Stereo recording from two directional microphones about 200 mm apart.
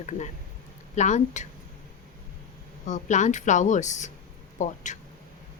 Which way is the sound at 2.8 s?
35° left (ahead or behind).